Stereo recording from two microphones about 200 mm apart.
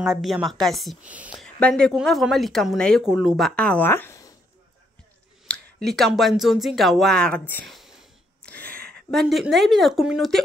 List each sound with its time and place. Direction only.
0.1 s a woman's voice: centre (ahead or behind)
5.5 s a sound: centre (ahead or behind)
9.1 s a woman's voice: centre (ahead or behind)